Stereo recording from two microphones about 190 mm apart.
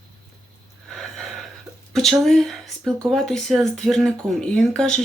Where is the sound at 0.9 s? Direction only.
Centre (ahead or behind).